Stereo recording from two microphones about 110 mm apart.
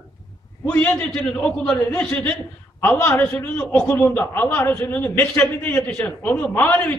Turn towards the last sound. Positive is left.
turn(degrees=15)  # may be behind; listen again after turning